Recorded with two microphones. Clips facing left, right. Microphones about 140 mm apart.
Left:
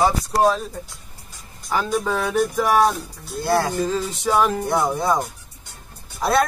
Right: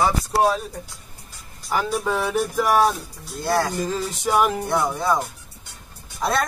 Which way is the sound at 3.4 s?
10° left (ahead or behind).